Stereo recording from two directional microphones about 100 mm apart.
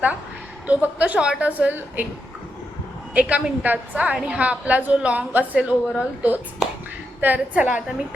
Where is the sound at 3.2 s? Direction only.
15° right (ahead or behind).